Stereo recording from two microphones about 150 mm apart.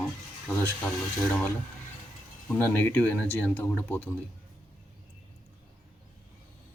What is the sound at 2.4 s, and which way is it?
Speech, 15° left (ahead or behind).